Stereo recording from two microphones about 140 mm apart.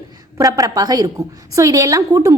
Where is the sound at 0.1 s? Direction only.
25° right (ahead or behind).